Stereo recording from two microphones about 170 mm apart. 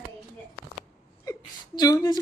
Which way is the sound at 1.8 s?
20° left (ahead or behind).